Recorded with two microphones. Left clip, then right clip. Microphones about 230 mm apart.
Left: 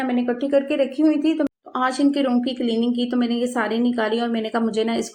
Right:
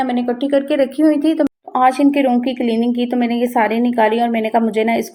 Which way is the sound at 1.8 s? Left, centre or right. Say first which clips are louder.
Right 7 dB; centre.